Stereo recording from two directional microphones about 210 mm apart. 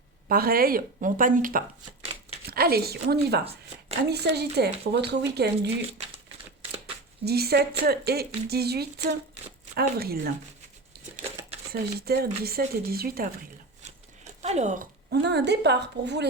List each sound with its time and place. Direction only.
0.3 s speech: 45° right (ahead or behind)
2.5 s speech: 45° right (ahead or behind)
7.3 s speech: 50° right (ahead or behind)
11.7 s speech: 45° right (ahead or behind)
14.4 s speech: 30° right (ahead or behind)
15.1 s speech: 55° right (ahead or behind)